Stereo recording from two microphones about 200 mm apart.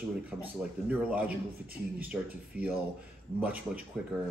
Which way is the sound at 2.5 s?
5° right (ahead or behind).